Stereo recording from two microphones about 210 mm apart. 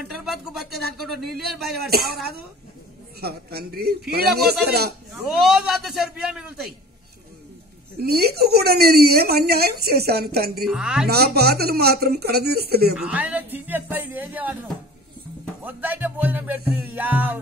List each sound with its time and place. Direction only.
0.0 s a sound: centre (ahead or behind)
1.0 s a man's voice: centre (ahead or behind)
1.4 s speech: 50° right (ahead or behind)
3.2 s speech: 50° right (ahead or behind)
5.3 s a man's voice: centre (ahead or behind)
8.0 s speech: 50° right (ahead or behind)
10.7 s a man's voice: 5° right (ahead or behind)
11.1 s speech: 50° right (ahead or behind)
12.9 s speech: 5° right (ahead or behind)
15.6 s music: 10° right (ahead or behind)
16.9 s speech: 10° right (ahead or behind)